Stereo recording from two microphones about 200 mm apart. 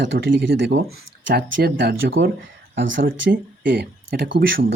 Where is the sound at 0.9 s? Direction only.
50° right (ahead or behind).